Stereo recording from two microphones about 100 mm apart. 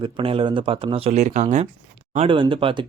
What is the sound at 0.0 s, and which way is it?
Speech, 65° right (ahead or behind).